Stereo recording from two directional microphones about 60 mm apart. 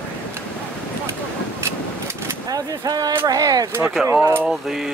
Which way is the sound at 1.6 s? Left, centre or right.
Right.